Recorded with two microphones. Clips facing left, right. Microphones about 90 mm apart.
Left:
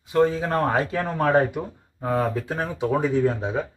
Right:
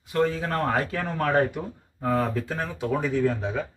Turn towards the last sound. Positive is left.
turn(degrees=20)  # may be behind; listen again after turning